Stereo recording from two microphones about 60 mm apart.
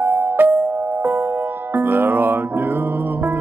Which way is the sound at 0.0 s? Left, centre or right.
Right.